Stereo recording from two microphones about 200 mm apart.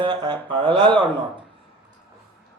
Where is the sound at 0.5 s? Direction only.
25° right (ahead or behind).